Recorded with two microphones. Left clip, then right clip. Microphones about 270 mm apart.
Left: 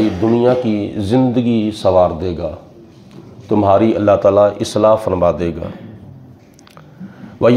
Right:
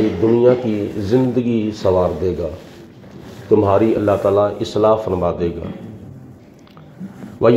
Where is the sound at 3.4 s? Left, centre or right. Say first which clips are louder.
Left 1 dB; left.